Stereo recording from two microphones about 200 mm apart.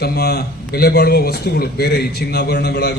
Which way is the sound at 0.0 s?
55° left (ahead or behind).